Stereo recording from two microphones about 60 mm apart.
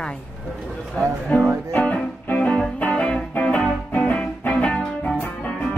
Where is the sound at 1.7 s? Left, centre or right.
Left.